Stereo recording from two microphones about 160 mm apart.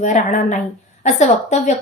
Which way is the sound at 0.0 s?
50° left (ahead or behind).